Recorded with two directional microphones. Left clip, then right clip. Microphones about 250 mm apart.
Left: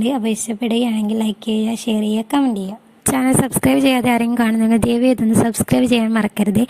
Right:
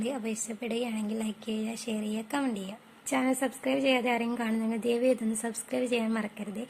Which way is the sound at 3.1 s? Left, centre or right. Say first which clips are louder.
Left 11 dB; left.